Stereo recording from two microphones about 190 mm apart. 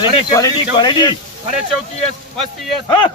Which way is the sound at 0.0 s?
20° left (ahead or behind).